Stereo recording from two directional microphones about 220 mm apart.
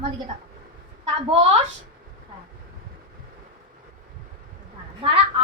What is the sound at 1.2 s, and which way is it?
Speech, 25° right (ahead or behind).